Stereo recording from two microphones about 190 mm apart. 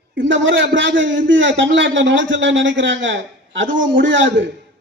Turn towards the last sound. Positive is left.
turn(degrees=-75)  # may be behind; listen again after turning